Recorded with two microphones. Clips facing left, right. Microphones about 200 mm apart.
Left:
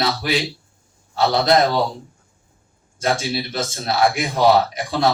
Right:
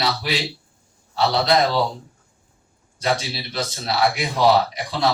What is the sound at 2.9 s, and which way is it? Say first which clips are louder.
A man's voice: left 2 dB; 45° left (ahead or behind).